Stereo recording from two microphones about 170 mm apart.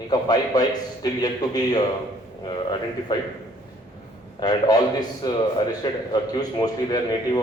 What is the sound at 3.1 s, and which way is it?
Speech, 25° left (ahead or behind).